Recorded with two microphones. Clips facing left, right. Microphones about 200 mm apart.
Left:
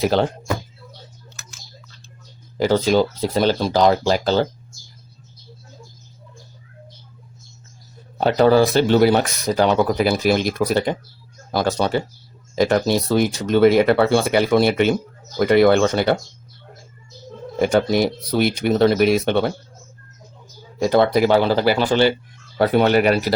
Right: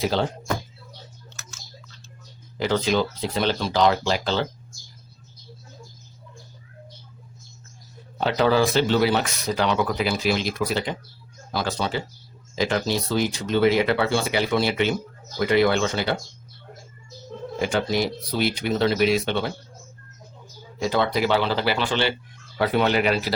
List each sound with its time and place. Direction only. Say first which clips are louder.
2.6 s speech: left 6 dB; 40° left (ahead or behind)
8.2 s speech: left 6 dB; 45° left (ahead or behind)
17.6 s speech: left 7 dB; 50° left (ahead or behind)
20.8 s speech: left 7 dB; 50° left (ahead or behind)